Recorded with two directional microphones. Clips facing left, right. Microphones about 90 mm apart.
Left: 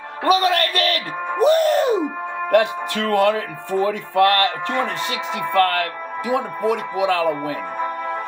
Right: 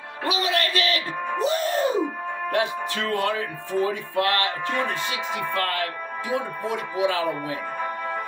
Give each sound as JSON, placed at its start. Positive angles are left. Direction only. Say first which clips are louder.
{"t": 0.2, "sound": "speech", "louder": "left 7 dB", "side_deg": 50}
{"t": 1.4, "sound": "music", "louder": "left 8 dB", "side_deg": 60}
{"t": 2.5, "sound": "speech", "louder": "left 8 dB", "side_deg": 65}